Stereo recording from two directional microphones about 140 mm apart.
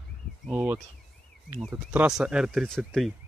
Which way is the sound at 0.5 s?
10° right (ahead or behind).